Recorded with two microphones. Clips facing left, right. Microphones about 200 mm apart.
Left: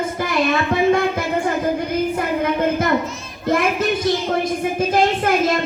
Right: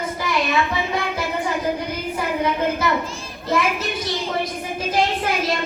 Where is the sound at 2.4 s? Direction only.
50° left (ahead or behind).